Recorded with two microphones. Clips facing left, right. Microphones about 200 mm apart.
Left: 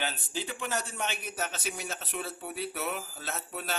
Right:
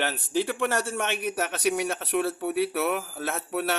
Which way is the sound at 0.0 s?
75° right (ahead or behind).